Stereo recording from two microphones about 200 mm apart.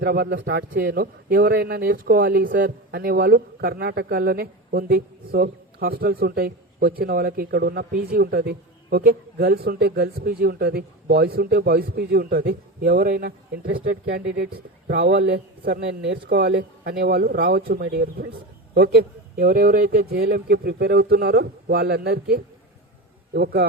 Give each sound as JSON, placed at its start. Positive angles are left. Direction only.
{"t": 0.0, "sound": "a man's voice", "side_deg": -50}